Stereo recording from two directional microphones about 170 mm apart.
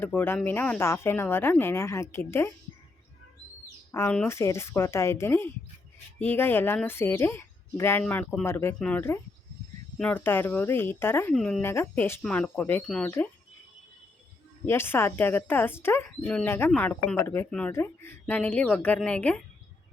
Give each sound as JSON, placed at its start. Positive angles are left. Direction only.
{"t": 0.0, "sound": "speech", "side_deg": 10}
{"t": 4.1, "sound": "speech", "side_deg": 15}
{"t": 8.4, "sound": "speech", "side_deg": 15}
{"t": 11.3, "sound": "speech", "side_deg": 0}
{"t": 11.6, "sound": "speech", "side_deg": 15}
{"t": 14.7, "sound": "speech", "side_deg": 15}